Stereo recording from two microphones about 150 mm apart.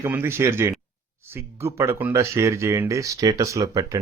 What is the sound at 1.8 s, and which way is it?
Speech, 15° right (ahead or behind).